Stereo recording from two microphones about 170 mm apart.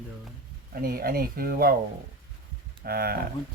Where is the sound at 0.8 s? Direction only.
60° right (ahead or behind).